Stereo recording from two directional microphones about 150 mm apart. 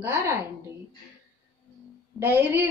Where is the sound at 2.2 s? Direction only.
10° right (ahead or behind).